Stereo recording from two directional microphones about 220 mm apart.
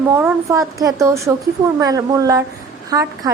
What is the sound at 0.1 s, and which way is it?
A woman's voice, 10° right (ahead or behind).